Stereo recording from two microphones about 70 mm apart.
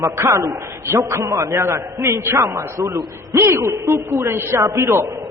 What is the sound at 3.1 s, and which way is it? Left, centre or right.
A man's voice, right.